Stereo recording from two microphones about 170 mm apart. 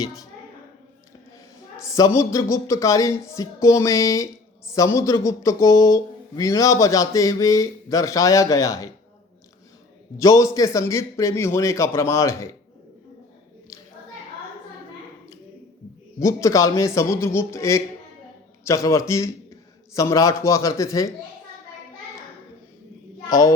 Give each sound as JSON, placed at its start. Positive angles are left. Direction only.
{"t": 1.9, "sound": "a man's voice", "side_deg": 20}
{"t": 10.2, "sound": "a man's voice", "side_deg": 20}
{"t": 16.2, "sound": "a man's voice", "side_deg": 20}
{"t": 23.3, "sound": "a man's voice", "side_deg": 20}